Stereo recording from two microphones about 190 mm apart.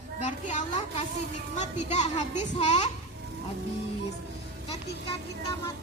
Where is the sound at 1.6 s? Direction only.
40° left (ahead or behind).